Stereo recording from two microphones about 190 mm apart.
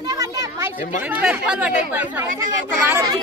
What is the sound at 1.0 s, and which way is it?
Speech, 10° right (ahead or behind).